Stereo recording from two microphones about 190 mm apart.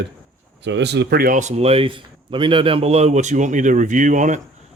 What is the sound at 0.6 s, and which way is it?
Speech, 65° right (ahead or behind).